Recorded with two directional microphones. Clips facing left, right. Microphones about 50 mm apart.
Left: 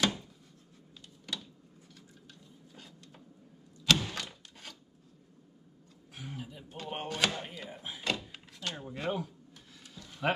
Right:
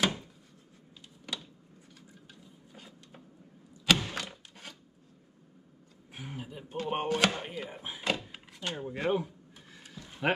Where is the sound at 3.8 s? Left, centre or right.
Centre.